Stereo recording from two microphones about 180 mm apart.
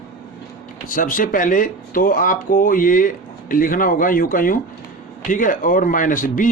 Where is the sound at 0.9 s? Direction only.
50° left (ahead or behind).